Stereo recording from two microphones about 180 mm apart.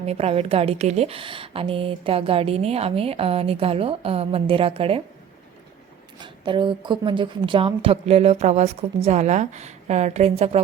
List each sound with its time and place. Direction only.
0.0 s a woman's voice: 35° right (ahead or behind)
6.1 s a woman's voice: 25° right (ahead or behind)